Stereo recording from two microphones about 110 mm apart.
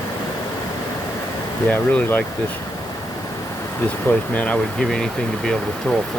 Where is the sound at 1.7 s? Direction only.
15° left (ahead or behind).